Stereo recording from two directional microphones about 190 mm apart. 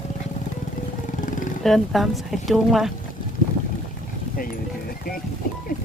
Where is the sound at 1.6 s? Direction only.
Centre (ahead or behind).